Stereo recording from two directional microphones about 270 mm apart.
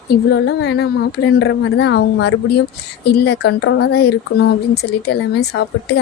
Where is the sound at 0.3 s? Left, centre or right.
Left.